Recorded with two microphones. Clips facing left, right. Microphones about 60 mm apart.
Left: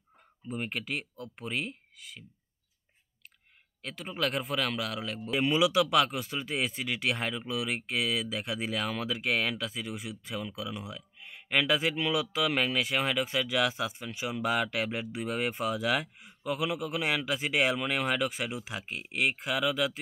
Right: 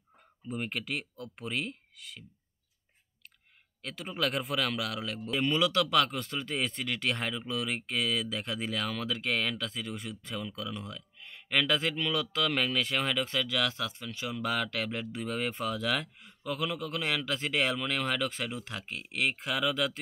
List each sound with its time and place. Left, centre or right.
0.5 s speech: centre
3.8 s a man's voice: centre